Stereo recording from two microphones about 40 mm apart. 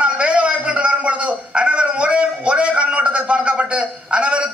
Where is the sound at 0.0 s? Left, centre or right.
Right.